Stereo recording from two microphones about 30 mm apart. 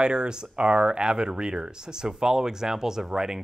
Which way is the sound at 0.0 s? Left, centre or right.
Right.